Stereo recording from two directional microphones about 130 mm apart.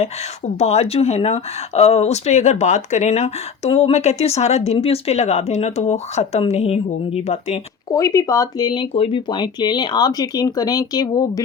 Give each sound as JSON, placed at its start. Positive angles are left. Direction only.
{"t": 0.6, "sound": "speech", "side_deg": 55}
{"t": 7.9, "sound": "speech", "side_deg": 25}
{"t": 8.9, "sound": "speech", "side_deg": 50}